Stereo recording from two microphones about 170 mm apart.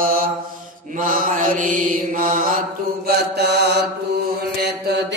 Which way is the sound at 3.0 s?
75° right (ahead or behind).